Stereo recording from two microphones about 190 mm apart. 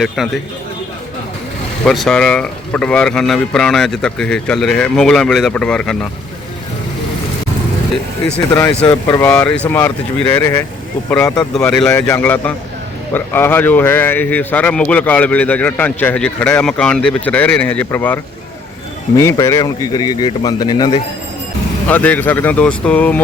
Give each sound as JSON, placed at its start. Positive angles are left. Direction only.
{"t": 0.2, "sound": "speech", "side_deg": 0}
{"t": 1.8, "sound": "speech", "side_deg": 0}
{"t": 8.9, "sound": "a man's voice", "side_deg": 20}
{"t": 9.2, "sound": "a man's voice", "side_deg": 5}
{"t": 21.8, "sound": "speech", "side_deg": 10}